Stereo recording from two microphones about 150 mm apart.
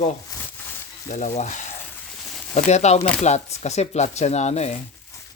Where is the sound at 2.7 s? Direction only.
50° left (ahead or behind).